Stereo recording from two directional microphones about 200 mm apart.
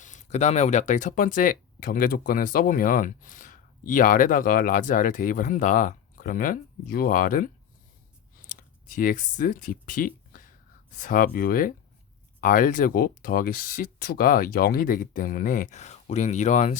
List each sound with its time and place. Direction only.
0.0 s speech: 40° left (ahead or behind)
9.0 s speech: 45° left (ahead or behind)